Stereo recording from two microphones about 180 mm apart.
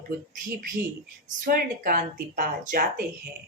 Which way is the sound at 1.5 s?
55° right (ahead or behind).